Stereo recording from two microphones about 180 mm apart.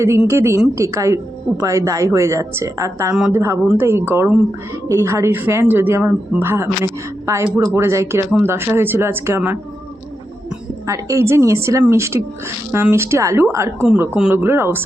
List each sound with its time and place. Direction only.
0.0 s a woman's voice: 15° right (ahead or behind)
10.8 s a woman's voice: 15° right (ahead or behind)